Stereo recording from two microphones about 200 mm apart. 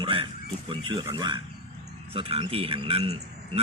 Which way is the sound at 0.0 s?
25° right (ahead or behind).